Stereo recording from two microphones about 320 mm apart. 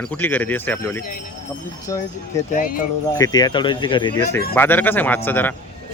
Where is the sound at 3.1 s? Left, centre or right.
Centre.